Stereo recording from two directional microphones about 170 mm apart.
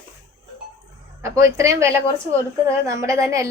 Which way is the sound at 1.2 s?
20° right (ahead or behind).